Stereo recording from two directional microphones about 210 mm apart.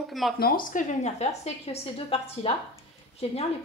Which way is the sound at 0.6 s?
35° left (ahead or behind).